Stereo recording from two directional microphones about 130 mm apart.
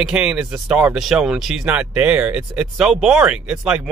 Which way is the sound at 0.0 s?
10° right (ahead or behind).